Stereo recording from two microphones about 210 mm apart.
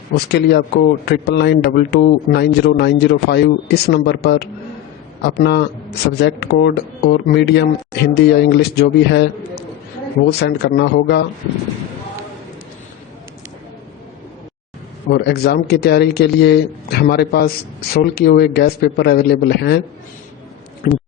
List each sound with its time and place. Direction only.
0.3 s speech: 50° left (ahead or behind)
15.1 s speech: 50° left (ahead or behind)
20.8 s speech: 40° left (ahead or behind)